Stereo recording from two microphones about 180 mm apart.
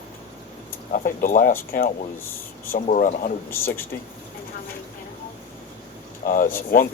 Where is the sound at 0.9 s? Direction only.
50° left (ahead or behind).